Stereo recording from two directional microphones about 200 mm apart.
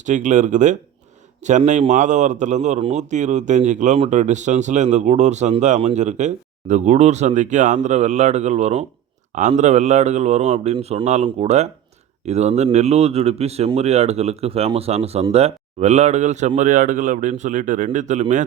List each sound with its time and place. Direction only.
0.0 s a man's voice: 40° right (ahead or behind)